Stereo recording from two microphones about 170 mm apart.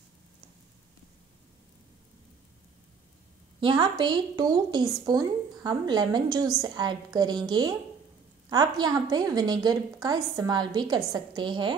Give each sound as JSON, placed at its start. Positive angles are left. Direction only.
{"t": 3.6, "sound": "a woman's voice", "side_deg": -25}